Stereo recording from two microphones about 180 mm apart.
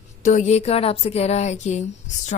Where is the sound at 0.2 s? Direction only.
40° left (ahead or behind).